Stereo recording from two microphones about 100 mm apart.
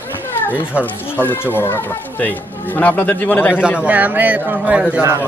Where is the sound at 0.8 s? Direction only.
20° left (ahead or behind).